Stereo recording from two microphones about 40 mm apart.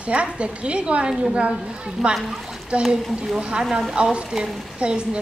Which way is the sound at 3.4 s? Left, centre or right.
Right.